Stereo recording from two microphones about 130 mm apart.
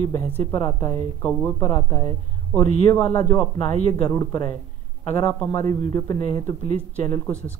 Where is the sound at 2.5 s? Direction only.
20° left (ahead or behind).